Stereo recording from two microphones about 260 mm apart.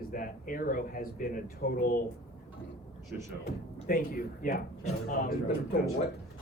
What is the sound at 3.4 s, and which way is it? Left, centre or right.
Speech, left.